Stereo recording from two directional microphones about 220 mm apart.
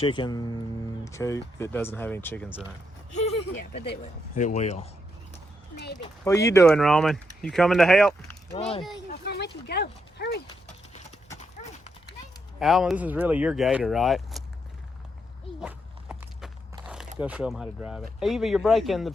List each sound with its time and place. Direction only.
0.0 s speech: 20° left (ahead or behind)
4.0 s speech: 35° left (ahead or behind)
5.7 s speech: 45° left (ahead or behind)
6.0 s speech: 15° left (ahead or behind)
6.7 s speech: centre (ahead or behind)
8.5 s speech: 25° left (ahead or behind)
9.2 s speech: 50° left (ahead or behind)
12.5 s speech: centre (ahead or behind)
15.6 s walk: 5° right (ahead or behind)
16.8 s biting: 5° right (ahead or behind)
17.2 s speech: 5° right (ahead or behind)